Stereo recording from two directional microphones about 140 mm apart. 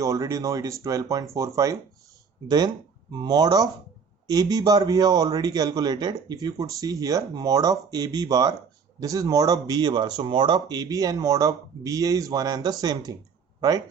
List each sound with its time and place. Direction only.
0.0 s a man's voice: 25° right (ahead or behind)